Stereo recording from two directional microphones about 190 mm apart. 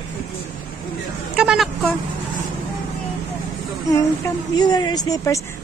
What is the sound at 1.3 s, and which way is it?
Vehicle, 5° right (ahead or behind).